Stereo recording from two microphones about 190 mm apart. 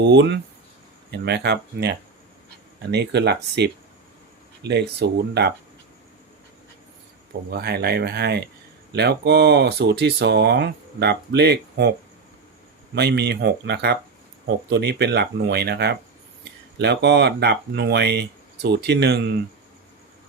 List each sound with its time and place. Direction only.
0.0 s speech: 65° right (ahead or behind)
7.5 s speech: 55° right (ahead or behind)
12.9 s speech: 60° right (ahead or behind)